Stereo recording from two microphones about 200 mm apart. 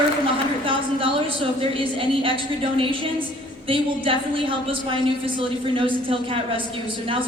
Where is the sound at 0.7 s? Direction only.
25° right (ahead or behind).